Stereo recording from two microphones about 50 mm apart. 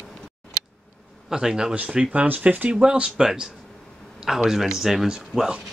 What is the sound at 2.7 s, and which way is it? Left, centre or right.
Speech, centre.